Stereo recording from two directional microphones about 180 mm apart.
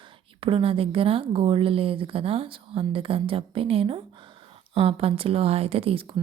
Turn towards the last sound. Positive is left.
turn(degrees=-30)  # may be behind; listen again after turning